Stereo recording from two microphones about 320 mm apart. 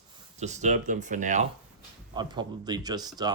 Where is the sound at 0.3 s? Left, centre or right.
Right.